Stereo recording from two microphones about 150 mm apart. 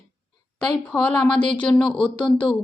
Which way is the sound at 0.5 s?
10° left (ahead or behind).